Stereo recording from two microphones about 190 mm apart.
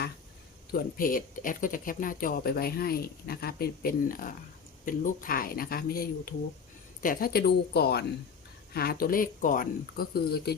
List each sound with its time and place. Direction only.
0.7 s speech: 50° left (ahead or behind)